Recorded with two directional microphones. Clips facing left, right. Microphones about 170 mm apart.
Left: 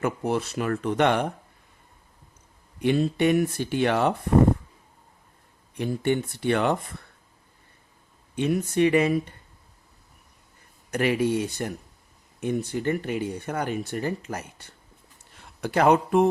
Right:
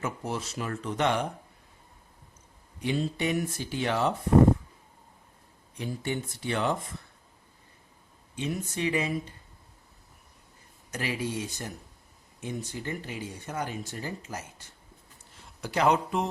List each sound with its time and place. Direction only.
0.0 s speech: 60° left (ahead or behind)
2.8 s speech: 60° left (ahead or behind)
5.7 s speech: 60° left (ahead or behind)
8.4 s speech: 60° left (ahead or behind)
10.9 s speech: 60° left (ahead or behind)